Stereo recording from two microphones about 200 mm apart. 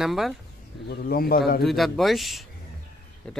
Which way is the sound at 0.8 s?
50° left (ahead or behind).